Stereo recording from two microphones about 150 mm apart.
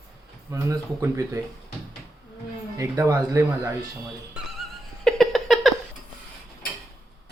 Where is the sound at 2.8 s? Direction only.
20° right (ahead or behind).